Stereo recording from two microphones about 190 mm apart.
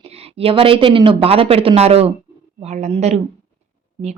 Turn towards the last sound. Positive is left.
turn(degrees=-35)  # may be behind; listen again after turning